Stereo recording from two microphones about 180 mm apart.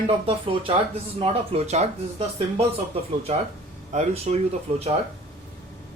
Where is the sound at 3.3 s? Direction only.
35° right (ahead or behind).